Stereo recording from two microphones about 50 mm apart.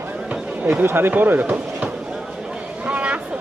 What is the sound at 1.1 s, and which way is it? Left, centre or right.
Speech, right.